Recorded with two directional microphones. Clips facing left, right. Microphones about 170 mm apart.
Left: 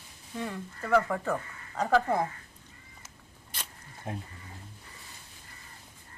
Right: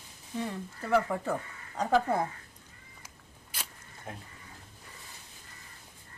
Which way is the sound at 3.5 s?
10° right (ahead or behind).